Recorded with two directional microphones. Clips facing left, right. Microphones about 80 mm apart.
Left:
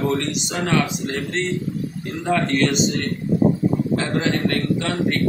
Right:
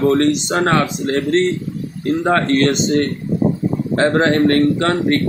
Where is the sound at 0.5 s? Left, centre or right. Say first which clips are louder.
Right 5 dB; right.